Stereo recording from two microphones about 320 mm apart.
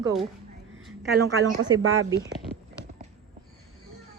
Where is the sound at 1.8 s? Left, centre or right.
Right.